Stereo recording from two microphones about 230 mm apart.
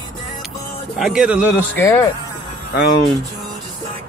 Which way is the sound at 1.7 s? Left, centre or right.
Centre.